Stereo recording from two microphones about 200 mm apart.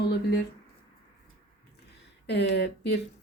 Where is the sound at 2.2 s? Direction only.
55° left (ahead or behind).